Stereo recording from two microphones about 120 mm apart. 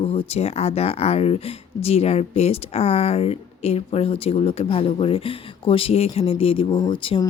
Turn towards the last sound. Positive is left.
turn(degrees=45)  # may be behind; listen again after turning